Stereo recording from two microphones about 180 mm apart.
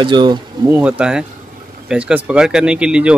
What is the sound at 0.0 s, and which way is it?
Speech, 25° right (ahead or behind).